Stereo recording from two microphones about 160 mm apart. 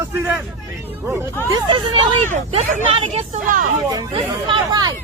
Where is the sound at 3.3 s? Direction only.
55° right (ahead or behind).